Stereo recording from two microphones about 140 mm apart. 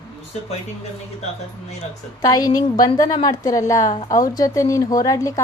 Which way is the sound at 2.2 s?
25° left (ahead or behind).